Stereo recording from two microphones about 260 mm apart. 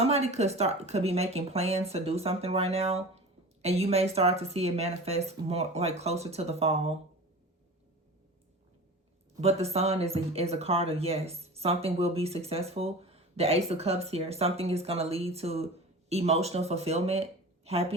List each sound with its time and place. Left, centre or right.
0.0 s speech: right
9.4 s a woman's voice: right